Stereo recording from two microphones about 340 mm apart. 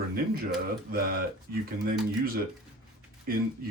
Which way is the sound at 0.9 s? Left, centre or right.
Right.